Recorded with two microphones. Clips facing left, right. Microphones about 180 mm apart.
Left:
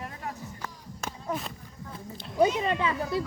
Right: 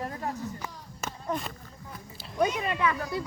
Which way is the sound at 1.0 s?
5° left (ahead or behind).